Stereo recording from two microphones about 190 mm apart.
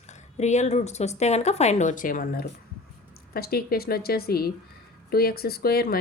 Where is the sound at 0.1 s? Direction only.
35° left (ahead or behind).